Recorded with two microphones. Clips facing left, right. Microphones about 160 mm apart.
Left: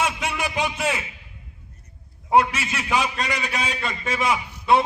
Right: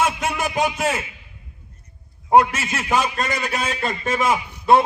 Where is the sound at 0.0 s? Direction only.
45° right (ahead or behind).